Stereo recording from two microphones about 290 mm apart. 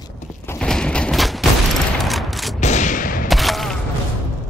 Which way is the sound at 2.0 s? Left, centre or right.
Centre.